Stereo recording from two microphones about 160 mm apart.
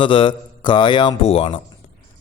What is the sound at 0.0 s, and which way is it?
A man's voice, 30° left (ahead or behind).